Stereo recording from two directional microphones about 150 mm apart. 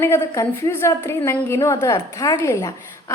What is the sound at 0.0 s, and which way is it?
A woman's voice, 15° left (ahead or behind).